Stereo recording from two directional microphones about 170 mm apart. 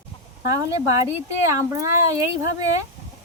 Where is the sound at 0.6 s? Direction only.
20° right (ahead or behind).